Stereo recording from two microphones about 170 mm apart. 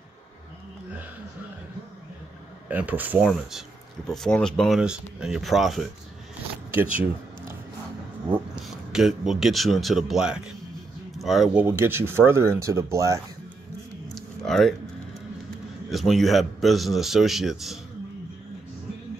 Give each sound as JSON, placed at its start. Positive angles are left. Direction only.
{"t": 2.7, "sound": "speech", "side_deg": -10}
{"t": 6.7, "sound": "a sound", "side_deg": -10}
{"t": 8.6, "sound": "speech", "side_deg": 0}
{"t": 11.6, "sound": "speech", "side_deg": -15}
{"t": 14.1, "sound": "a sound", "side_deg": 5}
{"t": 15.9, "sound": "speech", "side_deg": 0}